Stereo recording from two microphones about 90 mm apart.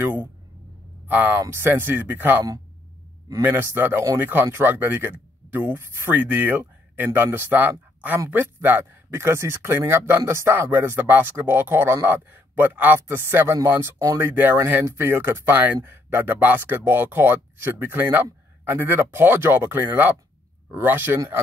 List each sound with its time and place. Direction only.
0.0 s speech: 20° right (ahead or behind)
3.4 s speech: 25° right (ahead or behind)